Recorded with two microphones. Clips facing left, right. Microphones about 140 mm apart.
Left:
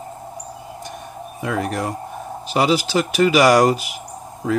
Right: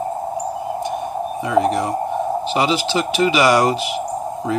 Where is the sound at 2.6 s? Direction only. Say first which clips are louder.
Left 1 dB; 45° left (ahead or behind).